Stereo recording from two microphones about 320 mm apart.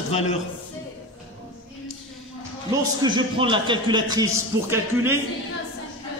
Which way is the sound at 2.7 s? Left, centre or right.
Centre.